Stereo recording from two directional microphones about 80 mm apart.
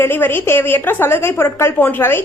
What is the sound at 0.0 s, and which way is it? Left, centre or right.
A woman's voice, left.